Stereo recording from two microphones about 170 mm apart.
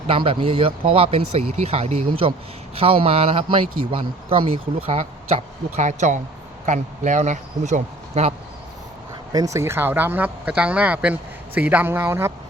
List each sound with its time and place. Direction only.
0.1 s speech: 30° right (ahead or behind)
9.3 s speech: 20° right (ahead or behind)